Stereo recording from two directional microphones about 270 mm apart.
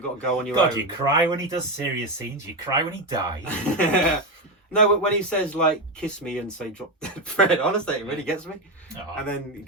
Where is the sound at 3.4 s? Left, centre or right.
Centre.